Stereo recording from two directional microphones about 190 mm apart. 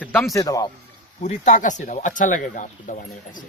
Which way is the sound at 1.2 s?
40° left (ahead or behind).